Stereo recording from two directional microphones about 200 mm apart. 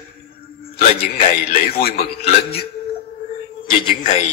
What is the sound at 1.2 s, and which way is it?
Speech, 50° left (ahead or behind).